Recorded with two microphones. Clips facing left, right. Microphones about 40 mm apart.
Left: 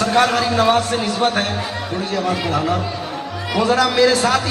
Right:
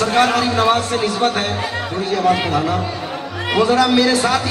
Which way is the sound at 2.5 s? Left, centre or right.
Centre.